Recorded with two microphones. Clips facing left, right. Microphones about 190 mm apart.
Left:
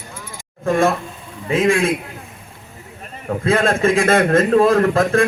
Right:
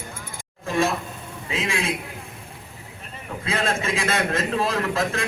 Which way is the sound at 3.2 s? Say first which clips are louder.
Left 9 dB; 50° left (ahead or behind).